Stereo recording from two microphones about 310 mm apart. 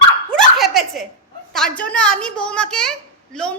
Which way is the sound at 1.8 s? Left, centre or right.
Centre.